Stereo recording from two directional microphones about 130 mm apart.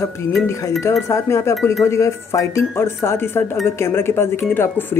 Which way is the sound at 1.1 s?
20° left (ahead or behind).